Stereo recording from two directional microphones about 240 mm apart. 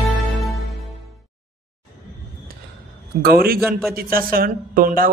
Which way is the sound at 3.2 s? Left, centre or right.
Right.